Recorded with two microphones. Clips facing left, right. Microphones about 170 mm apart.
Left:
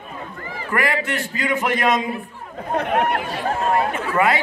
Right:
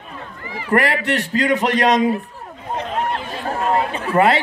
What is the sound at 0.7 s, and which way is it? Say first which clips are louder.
A man's voice: right 5 dB; 40° right (ahead or behind).